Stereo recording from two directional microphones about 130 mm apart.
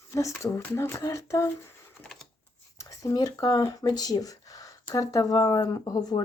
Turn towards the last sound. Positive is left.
turn(degrees=30)  # may be behind; listen again after turning